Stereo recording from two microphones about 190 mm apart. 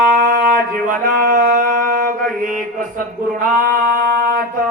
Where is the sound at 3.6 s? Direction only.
50° right (ahead or behind).